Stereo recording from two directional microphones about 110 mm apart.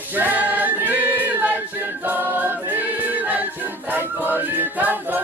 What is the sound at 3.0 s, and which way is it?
Music, 15° right (ahead or behind).